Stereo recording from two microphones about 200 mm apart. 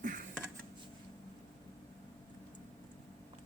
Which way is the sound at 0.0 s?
40° right (ahead or behind).